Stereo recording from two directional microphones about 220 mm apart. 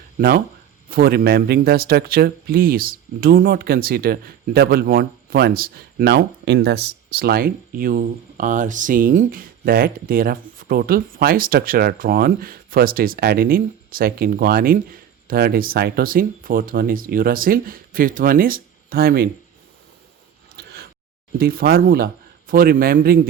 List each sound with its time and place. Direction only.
0.2 s speech: 40° right (ahead or behind)
20.6 s a sound: 45° right (ahead or behind)
21.3 s speech: 40° right (ahead or behind)